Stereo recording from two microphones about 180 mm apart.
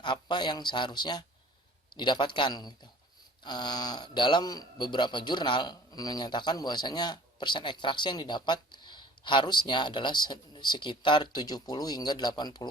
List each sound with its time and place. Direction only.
0.0 s a man's voice: 25° left (ahead or behind)